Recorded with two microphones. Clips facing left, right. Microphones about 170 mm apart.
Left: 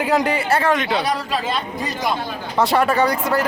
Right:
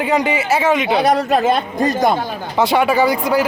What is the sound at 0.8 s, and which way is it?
Speech, 55° right (ahead or behind).